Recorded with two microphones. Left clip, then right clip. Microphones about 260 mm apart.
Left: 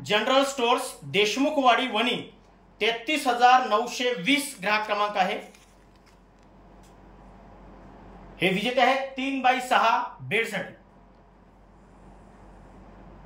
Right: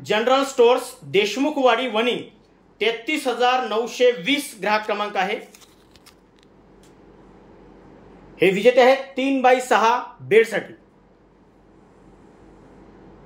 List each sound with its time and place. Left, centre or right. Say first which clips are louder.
0.0 s speech: right 3 dB; centre
8.4 s speech: right 8 dB; centre